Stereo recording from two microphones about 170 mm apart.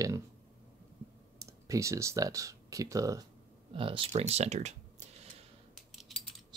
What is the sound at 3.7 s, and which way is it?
Speech, 30° right (ahead or behind).